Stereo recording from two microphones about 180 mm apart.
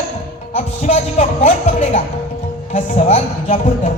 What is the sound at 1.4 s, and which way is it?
Speech, 35° left (ahead or behind).